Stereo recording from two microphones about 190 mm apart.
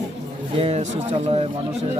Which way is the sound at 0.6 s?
30° right (ahead or behind).